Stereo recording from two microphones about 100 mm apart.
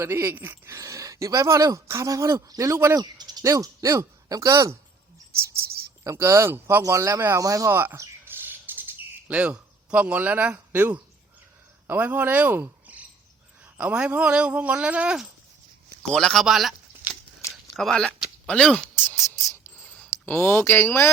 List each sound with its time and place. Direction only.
0.0 s speech: 25° right (ahead or behind)
3.0 s speech: 45° right (ahead or behind); by 15.3 s 10° right (ahead or behind)
16.1 s speech: 5° left (ahead or behind)
17.5 s a sound: centre (ahead or behind)
19.8 s speech: 15° left (ahead or behind)